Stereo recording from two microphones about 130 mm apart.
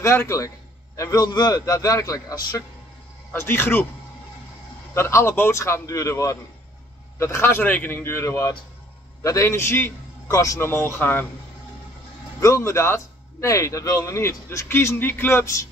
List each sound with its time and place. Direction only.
0.0 s a man's voice: 20° left (ahead or behind)
3.3 s a man's voice: 20° left (ahead or behind)
4.9 s a man's voice: 20° left (ahead or behind)
12.4 s a man's voice: 25° left (ahead or behind)